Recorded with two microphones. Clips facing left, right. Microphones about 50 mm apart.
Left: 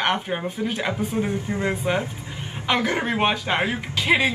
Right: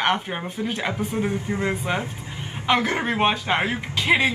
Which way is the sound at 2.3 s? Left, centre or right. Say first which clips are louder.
Even; centre.